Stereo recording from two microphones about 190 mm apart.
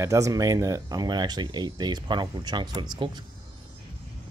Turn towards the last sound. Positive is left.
turn(degrees=-20)  # may be behind; listen again after turning